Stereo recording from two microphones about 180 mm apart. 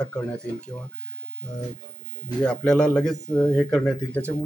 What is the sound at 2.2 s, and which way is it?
A man's voice, 5° left (ahead or behind).